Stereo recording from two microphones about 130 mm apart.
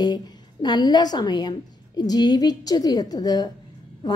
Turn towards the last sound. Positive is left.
turn(degrees=30)  # may be behind; listen again after turning